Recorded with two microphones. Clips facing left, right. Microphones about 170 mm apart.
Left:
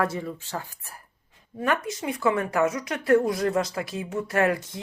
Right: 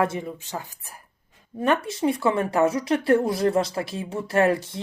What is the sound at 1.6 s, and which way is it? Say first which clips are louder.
A woman's voice: right 4 dB; 30° right (ahead or behind).